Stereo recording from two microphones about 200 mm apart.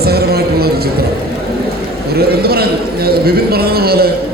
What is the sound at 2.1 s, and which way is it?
A man's voice, 50° right (ahead or behind).